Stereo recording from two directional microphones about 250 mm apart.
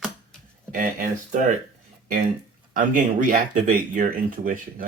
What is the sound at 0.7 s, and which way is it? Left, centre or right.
Speech, right.